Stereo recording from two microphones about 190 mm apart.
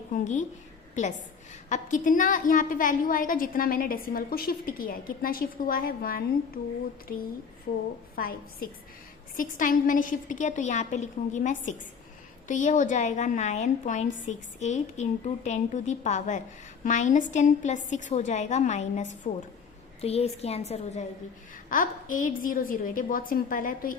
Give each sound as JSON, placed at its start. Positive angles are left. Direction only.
{"t": 0.1, "sound": "a woman's voice", "side_deg": 40}
{"t": 1.7, "sound": "a woman's voice", "side_deg": 40}
{"t": 7.7, "sound": "a woman's voice", "side_deg": 50}